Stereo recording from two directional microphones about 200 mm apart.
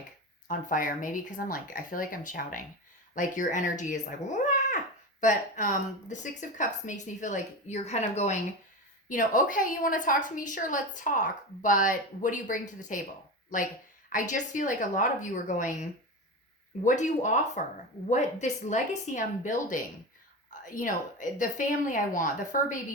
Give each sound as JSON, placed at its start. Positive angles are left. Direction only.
{"t": 0.4, "sound": "a woman's voice", "side_deg": 40}
{"t": 16.8, "sound": "a woman's voice", "side_deg": 35}